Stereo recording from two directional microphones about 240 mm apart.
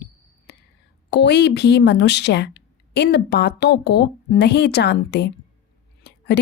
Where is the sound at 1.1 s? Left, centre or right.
Left.